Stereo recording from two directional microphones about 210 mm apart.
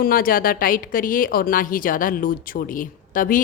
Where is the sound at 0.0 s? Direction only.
45° left (ahead or behind).